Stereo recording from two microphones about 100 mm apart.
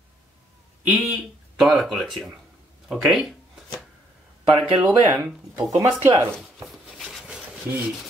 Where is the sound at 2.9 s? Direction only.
Centre (ahead or behind).